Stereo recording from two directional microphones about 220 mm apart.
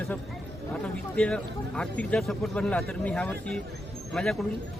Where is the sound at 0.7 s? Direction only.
5° left (ahead or behind).